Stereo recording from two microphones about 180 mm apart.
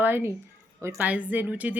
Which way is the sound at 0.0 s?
15° right (ahead or behind).